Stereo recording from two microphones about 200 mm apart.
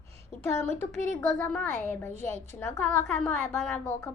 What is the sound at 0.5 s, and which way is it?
Speech, 35° right (ahead or behind).